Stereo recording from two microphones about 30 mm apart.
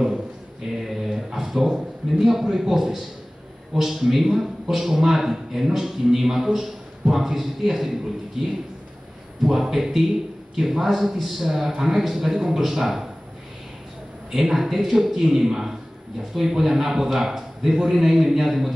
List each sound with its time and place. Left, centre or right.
0.8 s a sound: centre
2.4 s a man's voice: centre
2.7 s a man's voice: centre
14.3 s a man's voice: centre